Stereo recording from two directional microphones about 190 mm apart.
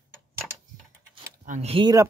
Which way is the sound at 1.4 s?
35° right (ahead or behind).